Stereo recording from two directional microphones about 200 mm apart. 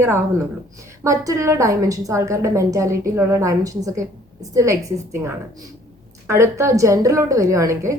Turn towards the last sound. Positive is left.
turn(degrees=-15)  # may be behind; listen again after turning